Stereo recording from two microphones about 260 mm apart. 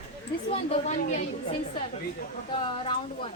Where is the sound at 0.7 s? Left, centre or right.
Left.